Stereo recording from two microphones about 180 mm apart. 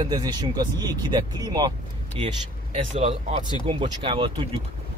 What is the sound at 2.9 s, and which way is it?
Speech, 35° right (ahead or behind).